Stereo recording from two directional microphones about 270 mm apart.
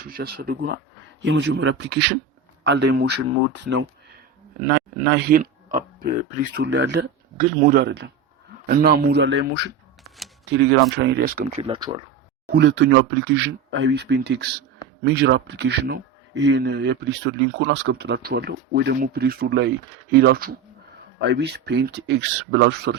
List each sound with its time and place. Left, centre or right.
0.0 s speech: right
11.6 s speech: centre
12.5 s speech: right